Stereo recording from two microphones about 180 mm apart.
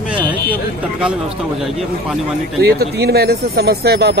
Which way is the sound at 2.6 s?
60° right (ahead or behind).